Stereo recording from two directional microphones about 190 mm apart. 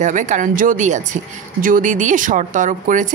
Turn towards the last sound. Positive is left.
turn(degrees=-45)  # may be behind; listen again after turning